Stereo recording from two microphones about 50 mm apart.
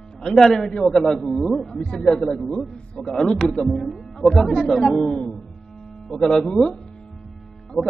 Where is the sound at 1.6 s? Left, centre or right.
Centre.